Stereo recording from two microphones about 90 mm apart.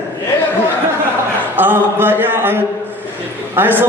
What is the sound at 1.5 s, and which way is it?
A man's voice, 20° right (ahead or behind).